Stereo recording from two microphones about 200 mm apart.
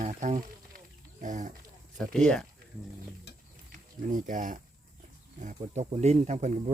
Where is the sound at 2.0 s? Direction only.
5° left (ahead or behind).